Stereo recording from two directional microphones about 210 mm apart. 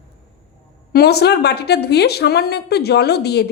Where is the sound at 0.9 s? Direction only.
50° left (ahead or behind).